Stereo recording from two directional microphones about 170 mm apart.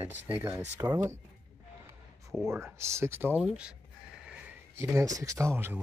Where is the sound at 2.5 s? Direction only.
15° right (ahead or behind).